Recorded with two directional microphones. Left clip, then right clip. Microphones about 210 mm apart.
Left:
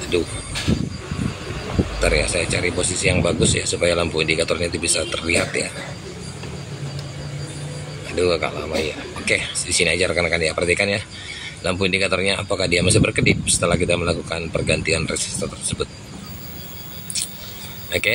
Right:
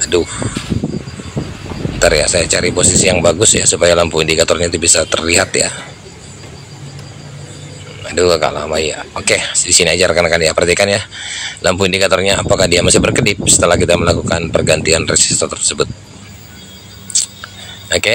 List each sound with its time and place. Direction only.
2.0 s speech: 15° right (ahead or behind)
8.1 s speech: 15° right (ahead or behind)
17.8 s a sound: 15° right (ahead or behind)